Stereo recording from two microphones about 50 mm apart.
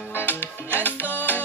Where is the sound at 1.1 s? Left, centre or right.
Left.